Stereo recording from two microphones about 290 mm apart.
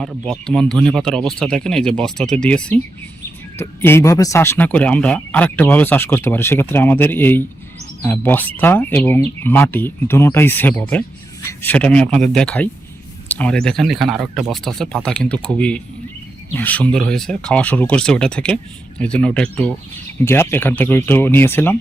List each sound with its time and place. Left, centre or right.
0.0 s speech: centre